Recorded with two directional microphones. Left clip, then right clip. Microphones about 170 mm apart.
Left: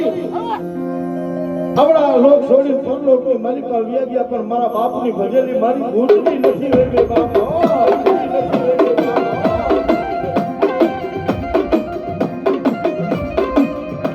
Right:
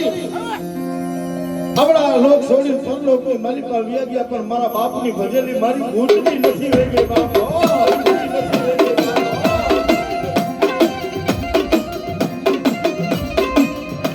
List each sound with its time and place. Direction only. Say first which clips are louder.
1.7 s a man's voice: left 1 dB; 50° right (ahead or behind)
9.4 s music: even; 40° right (ahead or behind)